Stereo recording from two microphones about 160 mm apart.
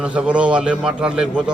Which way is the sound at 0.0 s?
5° right (ahead or behind).